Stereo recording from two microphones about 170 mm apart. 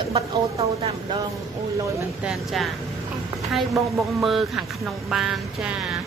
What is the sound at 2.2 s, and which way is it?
Speech, centre (ahead or behind).